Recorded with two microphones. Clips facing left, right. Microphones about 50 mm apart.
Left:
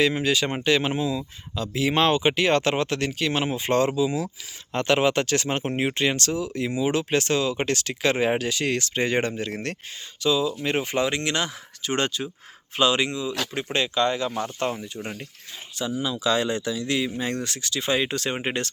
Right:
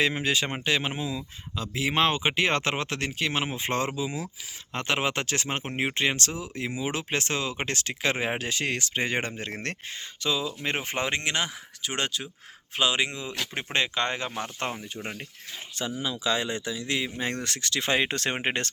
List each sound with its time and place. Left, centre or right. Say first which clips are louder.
0.0 s speech: left 4 dB; right
0.5 s speech: left 5 dB; centre
9.4 s speech: left 4 dB; right
11.3 s speech: left 2 dB; centre
11.8 s speech: left 5 dB; centre
13.7 s speech: left 4 dB; right
14.8 s speech: left 2 dB; centre
15.8 s speech: left 3 dB; right
16.2 s speech: left 5 dB; centre; by 17.4 s right
17.4 s speech: left 1 dB; right